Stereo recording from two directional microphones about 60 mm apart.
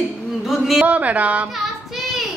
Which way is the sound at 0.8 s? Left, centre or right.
Right.